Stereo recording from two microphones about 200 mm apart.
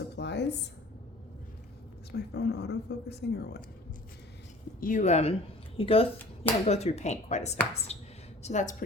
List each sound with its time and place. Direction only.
0.2 s a sound: 60° left (ahead or behind)
2.1 s speech: 55° left (ahead or behind)
4.8 s speech: 40° left (ahead or behind)